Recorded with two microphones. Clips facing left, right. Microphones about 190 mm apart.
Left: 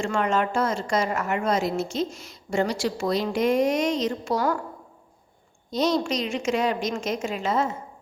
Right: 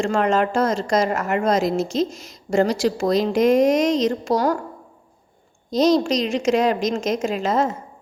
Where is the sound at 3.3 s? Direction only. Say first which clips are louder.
Right 6 dB; 90° right.